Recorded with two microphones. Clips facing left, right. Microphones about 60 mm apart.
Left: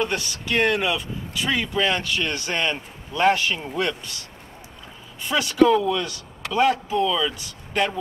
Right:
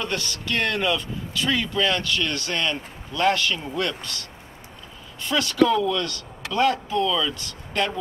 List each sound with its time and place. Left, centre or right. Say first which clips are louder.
0.0 s speech: left 3 dB; centre